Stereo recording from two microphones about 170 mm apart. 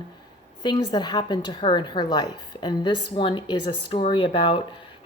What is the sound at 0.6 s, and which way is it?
A woman's voice, 25° left (ahead or behind).